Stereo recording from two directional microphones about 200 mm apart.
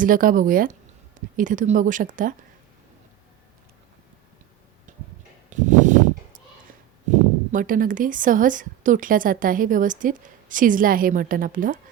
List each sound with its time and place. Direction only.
0.0 s speech: 45° right (ahead or behind)
4.9 s tick-tock: 40° right (ahead or behind)
5.5 s a sound: 40° right (ahead or behind)
7.1 s speech: 40° right (ahead or behind)